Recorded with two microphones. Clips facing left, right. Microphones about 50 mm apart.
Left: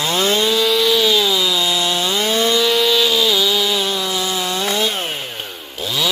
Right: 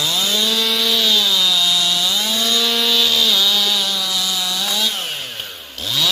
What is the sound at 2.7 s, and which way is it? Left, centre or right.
Chainsaw, centre.